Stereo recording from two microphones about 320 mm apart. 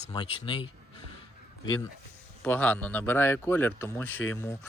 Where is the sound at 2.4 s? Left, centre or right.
Centre.